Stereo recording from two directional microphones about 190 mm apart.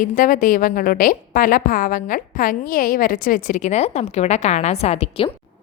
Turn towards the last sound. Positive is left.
turn(degrees=30)  # may be behind; listen again after turning